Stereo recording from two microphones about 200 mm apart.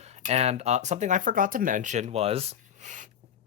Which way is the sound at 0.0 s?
35° right (ahead or behind).